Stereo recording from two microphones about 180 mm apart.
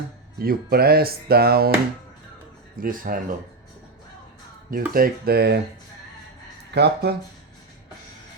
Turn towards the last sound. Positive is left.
turn(degrees=-65)  # may be behind; listen again after turning